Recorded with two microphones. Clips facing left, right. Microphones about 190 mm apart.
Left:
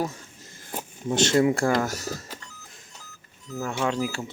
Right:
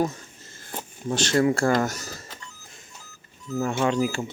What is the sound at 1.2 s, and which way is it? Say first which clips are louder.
Speech: left 1 dB; 20° left (ahead or behind).